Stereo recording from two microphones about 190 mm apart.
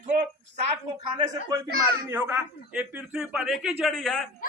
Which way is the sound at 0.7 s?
25° right (ahead or behind).